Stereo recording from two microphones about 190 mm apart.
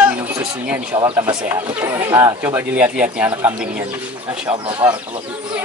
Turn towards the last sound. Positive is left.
turn(degrees=-25)  # may be behind; listen again after turning